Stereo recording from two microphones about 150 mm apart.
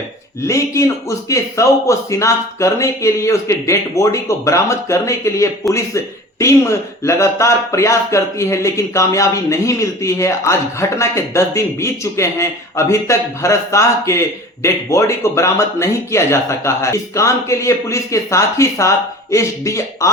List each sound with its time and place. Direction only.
0.4 s speech: 20° left (ahead or behind)